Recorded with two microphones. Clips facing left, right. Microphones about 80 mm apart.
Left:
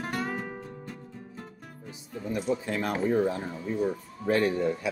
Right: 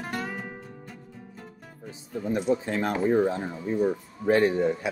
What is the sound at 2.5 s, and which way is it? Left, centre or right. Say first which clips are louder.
Speech: right 2 dB; right.